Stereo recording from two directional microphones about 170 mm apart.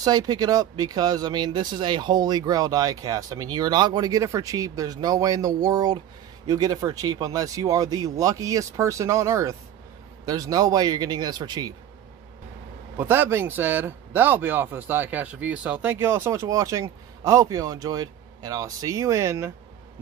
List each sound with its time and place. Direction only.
0.0 s speech: 25° right (ahead or behind)
12.9 s speech: 10° right (ahead or behind)